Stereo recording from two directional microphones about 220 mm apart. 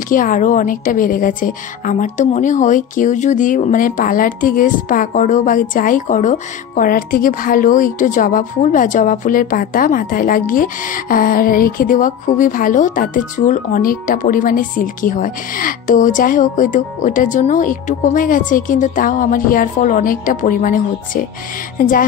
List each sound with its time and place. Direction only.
0.1 s a woman's voice: 40° left (ahead or behind)